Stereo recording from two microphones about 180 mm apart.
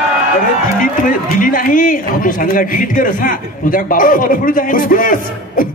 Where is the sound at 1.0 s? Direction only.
50° left (ahead or behind).